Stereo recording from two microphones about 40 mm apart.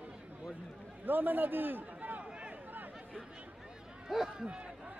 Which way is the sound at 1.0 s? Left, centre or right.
Right.